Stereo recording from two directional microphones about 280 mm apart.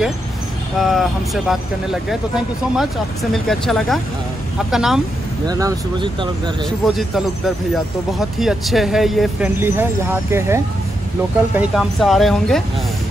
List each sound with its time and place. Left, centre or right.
0.7 s speech: centre
5.5 s speech: centre
6.9 s speech: centre